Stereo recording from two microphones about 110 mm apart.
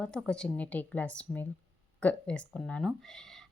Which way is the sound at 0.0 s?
5° left (ahead or behind).